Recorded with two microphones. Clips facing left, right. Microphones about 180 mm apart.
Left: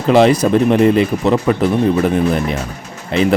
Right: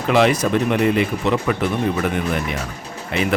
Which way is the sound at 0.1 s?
35° left (ahead or behind).